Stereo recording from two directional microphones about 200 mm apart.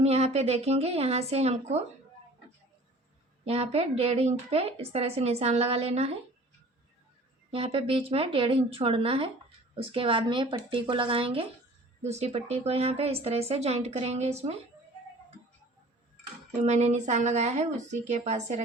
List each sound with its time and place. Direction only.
0.0 s a woman's voice: 35° right (ahead or behind)
3.4 s a woman's voice: 30° right (ahead or behind)
7.5 s a woman's voice: 25° right (ahead or behind)
16.6 s a woman's voice: 35° right (ahead or behind)